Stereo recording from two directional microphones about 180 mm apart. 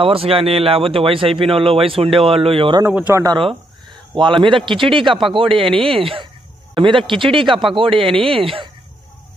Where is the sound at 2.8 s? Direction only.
10° right (ahead or behind).